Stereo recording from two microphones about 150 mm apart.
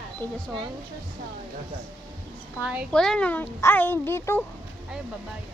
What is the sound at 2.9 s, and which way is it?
Speech, 5° left (ahead or behind).